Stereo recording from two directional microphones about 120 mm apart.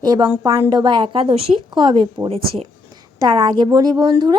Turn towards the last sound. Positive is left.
turn(degrees=-40)  # may be behind; listen again after turning